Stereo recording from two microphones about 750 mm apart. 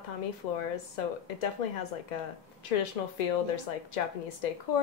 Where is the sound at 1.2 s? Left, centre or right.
Left.